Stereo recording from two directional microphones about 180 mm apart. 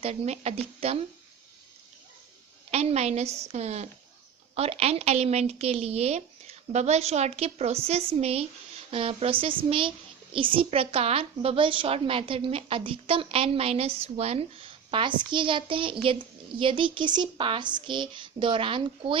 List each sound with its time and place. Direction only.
0.0 s a woman's voice: 35° right (ahead or behind)
2.6 s a woman's voice: 35° right (ahead or behind)